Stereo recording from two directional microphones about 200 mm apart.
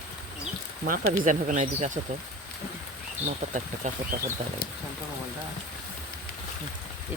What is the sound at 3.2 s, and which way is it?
Speech, 40° right (ahead or behind).